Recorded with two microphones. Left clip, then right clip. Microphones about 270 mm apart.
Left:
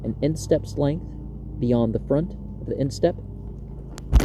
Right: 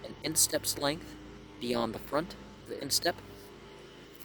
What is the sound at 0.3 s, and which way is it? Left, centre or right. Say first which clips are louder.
Speech: left 8 dB; centre.